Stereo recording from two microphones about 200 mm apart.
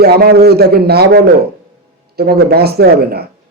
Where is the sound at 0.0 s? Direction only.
50° right (ahead or behind).